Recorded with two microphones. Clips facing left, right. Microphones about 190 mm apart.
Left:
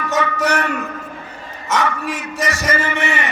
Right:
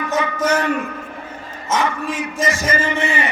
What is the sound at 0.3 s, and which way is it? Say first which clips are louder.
Speech: right 1 dB; 70° left (ahead or behind).